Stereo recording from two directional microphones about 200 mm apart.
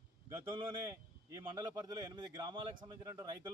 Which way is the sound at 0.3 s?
20° right (ahead or behind).